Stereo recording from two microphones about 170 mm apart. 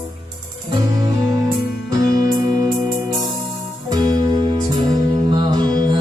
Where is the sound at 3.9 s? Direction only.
25° right (ahead or behind).